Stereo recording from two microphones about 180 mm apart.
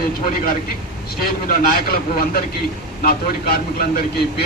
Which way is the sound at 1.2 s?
55° left (ahead or behind).